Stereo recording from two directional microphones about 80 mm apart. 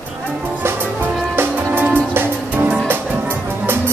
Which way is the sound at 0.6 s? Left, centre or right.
Right.